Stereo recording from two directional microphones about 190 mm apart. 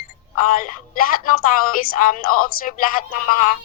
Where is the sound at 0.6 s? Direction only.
45° left (ahead or behind).